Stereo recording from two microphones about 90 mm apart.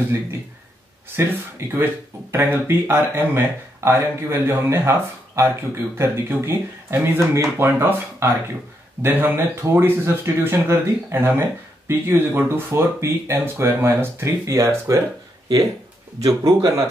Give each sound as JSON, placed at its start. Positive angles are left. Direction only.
{"t": 1.6, "sound": "speech", "side_deg": -30}
{"t": 15.4, "sound": "speech", "side_deg": -45}